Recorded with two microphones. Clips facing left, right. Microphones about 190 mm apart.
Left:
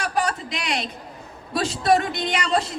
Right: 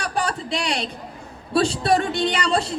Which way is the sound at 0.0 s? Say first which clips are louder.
Left 1 dB; 30° right (ahead or behind).